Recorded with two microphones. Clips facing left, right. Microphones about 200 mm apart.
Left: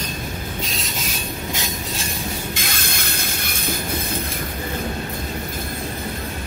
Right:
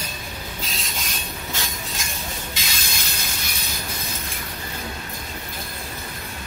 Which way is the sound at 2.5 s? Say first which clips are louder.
Left 5 dB; 55° left (ahead or behind).